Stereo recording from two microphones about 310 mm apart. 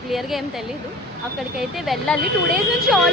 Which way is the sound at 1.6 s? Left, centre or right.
Centre.